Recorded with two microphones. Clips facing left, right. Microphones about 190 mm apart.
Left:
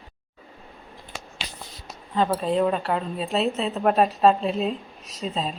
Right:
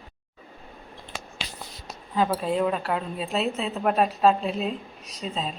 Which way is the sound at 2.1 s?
5° right (ahead or behind).